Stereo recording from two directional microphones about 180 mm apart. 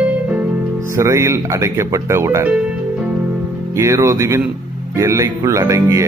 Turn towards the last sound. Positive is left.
turn(degrees=-20)  # may be behind; listen again after turning